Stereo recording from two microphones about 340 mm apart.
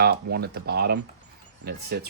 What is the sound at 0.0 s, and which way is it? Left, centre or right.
Speech, right.